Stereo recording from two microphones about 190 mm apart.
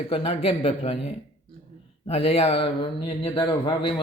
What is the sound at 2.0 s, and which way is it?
A man's voice, 30° left (ahead or behind).